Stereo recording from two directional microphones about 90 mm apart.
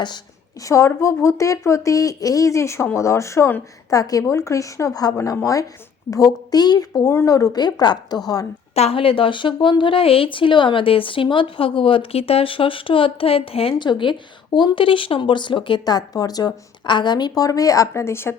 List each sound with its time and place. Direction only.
0.6 s a woman's voice: 35° left (ahead or behind)
8.9 s speech: 90° left
13.8 s a woman's voice: 60° left (ahead or behind)
15.8 s a woman's voice: 45° left (ahead or behind); by 18.3 s 25° left (ahead or behind)